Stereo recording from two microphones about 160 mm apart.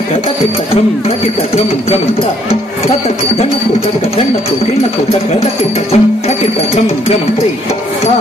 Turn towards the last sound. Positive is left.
turn(degrees=40)  # may be behind; listen again after turning